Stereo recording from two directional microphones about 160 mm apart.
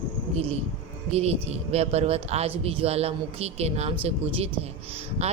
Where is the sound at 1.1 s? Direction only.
40° right (ahead or behind).